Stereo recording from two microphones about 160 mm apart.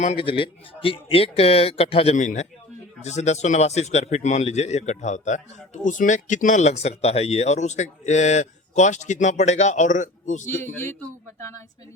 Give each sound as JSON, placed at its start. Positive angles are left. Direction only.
{"t": 0.0, "sound": "a man's voice", "side_deg": 45}
{"t": 0.3, "sound": "speech", "side_deg": 30}
{"t": 2.1, "sound": "a man's voice", "side_deg": 50}
{"t": 10.6, "sound": "a man's voice", "side_deg": 15}